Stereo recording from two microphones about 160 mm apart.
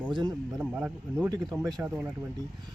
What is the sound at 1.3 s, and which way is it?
Speech, 25° right (ahead or behind).